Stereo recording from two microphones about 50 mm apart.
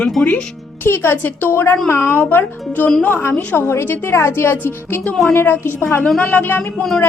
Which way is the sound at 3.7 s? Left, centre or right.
Left.